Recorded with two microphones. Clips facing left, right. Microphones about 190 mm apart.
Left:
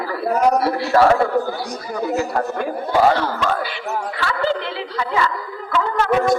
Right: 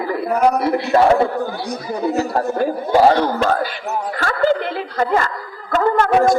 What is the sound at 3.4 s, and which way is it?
A woman's voice, 45° right (ahead or behind).